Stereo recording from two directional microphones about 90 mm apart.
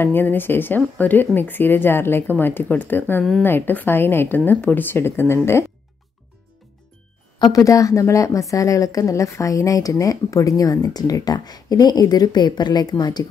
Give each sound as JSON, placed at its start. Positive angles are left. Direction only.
{"t": 0.0, "sound": "speech", "side_deg": 20}
{"t": 7.3, "sound": "speech", "side_deg": 50}
{"t": 7.6, "sound": "speech", "side_deg": 40}